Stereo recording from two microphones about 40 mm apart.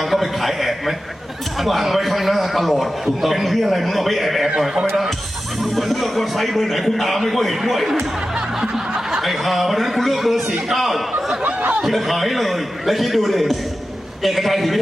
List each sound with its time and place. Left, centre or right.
0.1 s a sound: centre
1.6 s a man's voice: centre
4.4 s speech: centre
5.7 s a man's voice: centre
9.2 s a man's voice: centre
11.4 s a sound: right
11.8 s a man's voice: centre